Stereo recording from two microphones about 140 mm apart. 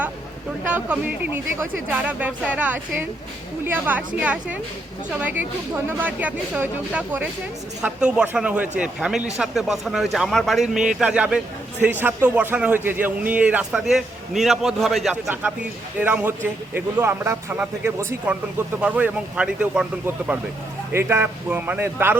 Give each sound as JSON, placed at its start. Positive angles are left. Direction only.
{"t": 0.7, "sound": "speech", "side_deg": -10}
{"t": 16.0, "sound": "speech", "side_deg": -10}